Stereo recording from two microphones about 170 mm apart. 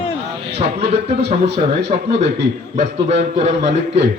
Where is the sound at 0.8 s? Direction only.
40° right (ahead or behind).